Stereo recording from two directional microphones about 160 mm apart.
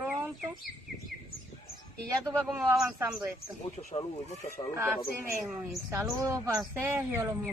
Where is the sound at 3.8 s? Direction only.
30° left (ahead or behind).